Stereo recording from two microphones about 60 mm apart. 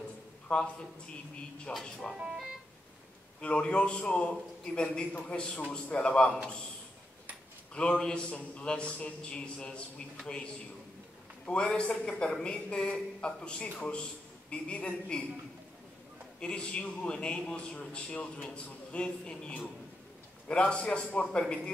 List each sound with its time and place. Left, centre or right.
0.5 s a man's voice: centre
1.7 s speech: centre
3.3 s a man's voice: centre
7.7 s a man's voice: centre
16.3 s a man's voice: centre